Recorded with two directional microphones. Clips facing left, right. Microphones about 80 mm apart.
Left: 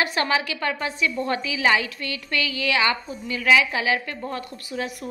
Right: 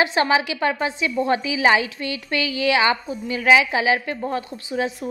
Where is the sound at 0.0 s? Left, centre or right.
Right.